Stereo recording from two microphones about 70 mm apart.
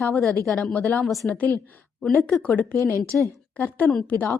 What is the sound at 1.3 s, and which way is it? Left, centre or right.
Speech, left.